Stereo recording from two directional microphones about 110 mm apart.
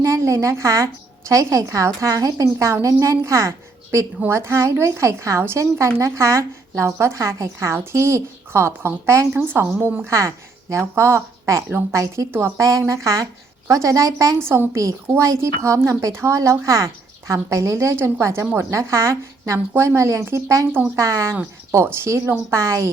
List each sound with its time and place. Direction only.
0.0 s a woman's voice: 30° right (ahead or behind)